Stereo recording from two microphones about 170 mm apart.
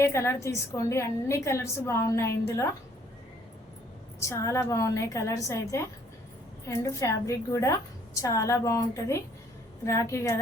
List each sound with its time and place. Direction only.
0.0 s a woman's voice: 15° left (ahead or behind)
4.2 s a woman's voice: 15° left (ahead or behind)